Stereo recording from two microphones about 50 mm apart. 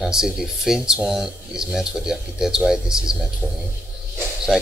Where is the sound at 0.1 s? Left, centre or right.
Centre.